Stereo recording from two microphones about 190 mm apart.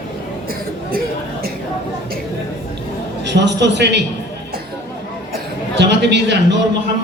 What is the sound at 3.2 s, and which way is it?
Speech, 65° right (ahead or behind).